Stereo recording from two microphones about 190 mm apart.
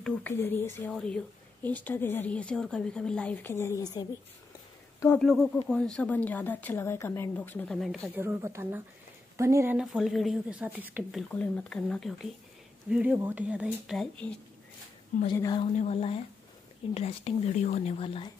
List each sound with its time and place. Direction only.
0.0 s speech: 10° left (ahead or behind)
5.2 s speech: centre (ahead or behind)
8.1 s speech: 10° right (ahead or behind)
9.8 s speech: centre (ahead or behind)
12.9 s speech: 10° right (ahead or behind)
15.3 s a woman's voice: 20° left (ahead or behind)
15.6 s speech: 35° left (ahead or behind)